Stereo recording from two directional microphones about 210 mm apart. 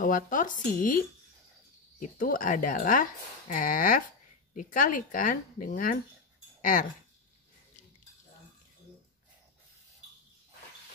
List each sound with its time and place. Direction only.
0.0 s speech: 40° left (ahead or behind)